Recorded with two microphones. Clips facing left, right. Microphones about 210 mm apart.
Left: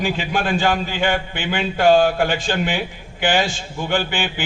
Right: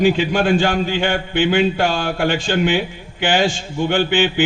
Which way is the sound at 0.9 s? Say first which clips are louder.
Right 2 dB; 45° right (ahead or behind).